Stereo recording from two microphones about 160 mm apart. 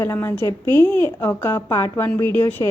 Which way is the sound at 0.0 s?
15° left (ahead or behind).